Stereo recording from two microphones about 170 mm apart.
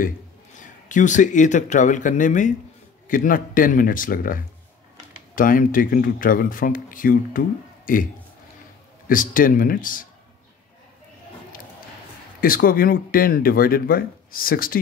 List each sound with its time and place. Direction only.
0.8 s speech: 45° left (ahead or behind)
12.4 s speech: 60° left (ahead or behind)